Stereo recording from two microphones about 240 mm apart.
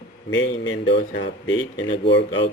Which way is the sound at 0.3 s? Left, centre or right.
Left.